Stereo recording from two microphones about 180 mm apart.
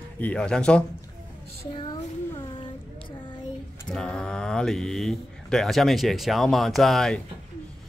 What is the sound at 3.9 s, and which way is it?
Speech, 5° left (ahead or behind).